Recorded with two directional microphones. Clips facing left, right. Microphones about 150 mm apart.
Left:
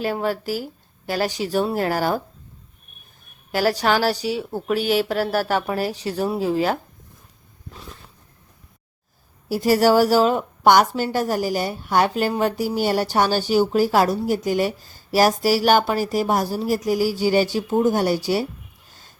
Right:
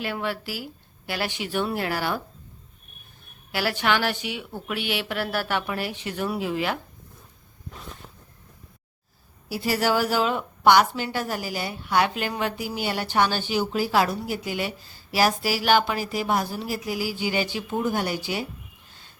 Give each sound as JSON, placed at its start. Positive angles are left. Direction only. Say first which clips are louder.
{"t": 0.0, "sound": "a woman's voice", "louder": "left 6 dB", "side_deg": 40}
{"t": 3.5, "sound": "a woman's voice", "louder": "left 5 dB", "side_deg": 40}
{"t": 9.5, "sound": "a woman's voice", "louder": "left 7 dB", "side_deg": 45}